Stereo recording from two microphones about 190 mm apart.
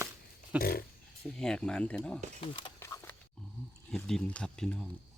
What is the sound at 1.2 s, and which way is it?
Speech, 5° left (ahead or behind).